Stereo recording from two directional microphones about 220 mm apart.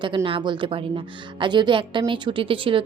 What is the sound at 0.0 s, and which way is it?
A woman's voice, 25° right (ahead or behind).